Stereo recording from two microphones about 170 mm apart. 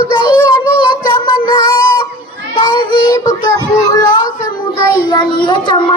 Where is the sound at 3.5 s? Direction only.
20° left (ahead or behind).